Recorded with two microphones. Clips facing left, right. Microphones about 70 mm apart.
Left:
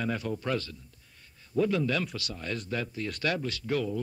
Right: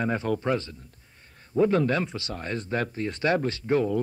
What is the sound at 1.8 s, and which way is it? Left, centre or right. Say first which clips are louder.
Speech: right 4 dB; right.